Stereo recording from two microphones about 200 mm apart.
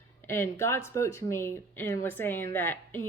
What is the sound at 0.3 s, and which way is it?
Speech, 10° left (ahead or behind).